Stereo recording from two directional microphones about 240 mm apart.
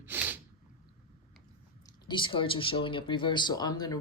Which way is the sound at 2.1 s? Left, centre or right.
Centre.